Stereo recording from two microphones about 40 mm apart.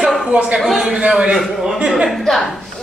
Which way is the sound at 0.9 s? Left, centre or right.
Right.